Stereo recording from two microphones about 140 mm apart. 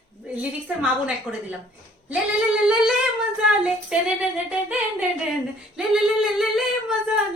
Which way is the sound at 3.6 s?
5° right (ahead or behind).